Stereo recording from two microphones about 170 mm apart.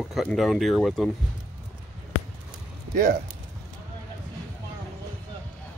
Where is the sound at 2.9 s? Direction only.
65° right (ahead or behind).